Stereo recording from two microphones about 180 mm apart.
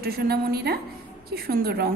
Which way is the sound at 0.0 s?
60° right (ahead or behind).